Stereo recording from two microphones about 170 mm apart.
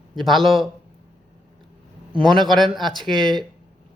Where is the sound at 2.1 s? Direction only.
30° right (ahead or behind).